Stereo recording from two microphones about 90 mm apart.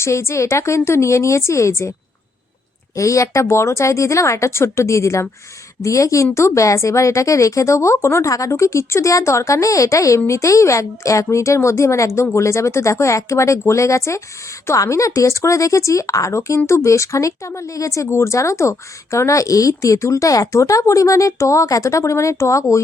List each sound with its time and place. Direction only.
0.0 s speech: 30° left (ahead or behind)
2.9 s speech: 35° left (ahead or behind)